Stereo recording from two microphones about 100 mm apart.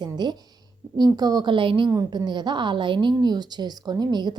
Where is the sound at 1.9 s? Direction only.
40° right (ahead or behind).